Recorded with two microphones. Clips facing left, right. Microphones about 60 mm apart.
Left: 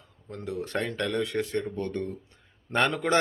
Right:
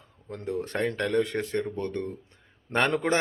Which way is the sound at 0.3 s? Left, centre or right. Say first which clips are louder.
Right 2 dB; right.